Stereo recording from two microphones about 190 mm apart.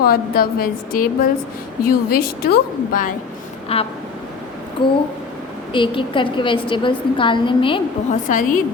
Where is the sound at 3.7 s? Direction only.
30° left (ahead or behind).